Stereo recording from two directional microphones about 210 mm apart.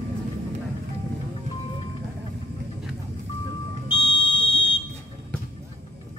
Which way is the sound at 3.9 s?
25° left (ahead or behind).